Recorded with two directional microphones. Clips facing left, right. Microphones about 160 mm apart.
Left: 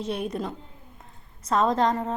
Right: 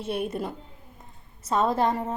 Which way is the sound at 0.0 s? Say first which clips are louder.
Even; 5° right (ahead or behind).